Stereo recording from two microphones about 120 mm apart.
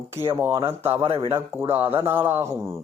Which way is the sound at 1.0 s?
50° right (ahead or behind).